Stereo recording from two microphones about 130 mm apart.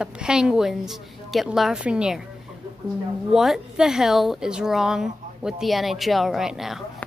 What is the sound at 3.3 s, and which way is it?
A woman's voice, 5° right (ahead or behind).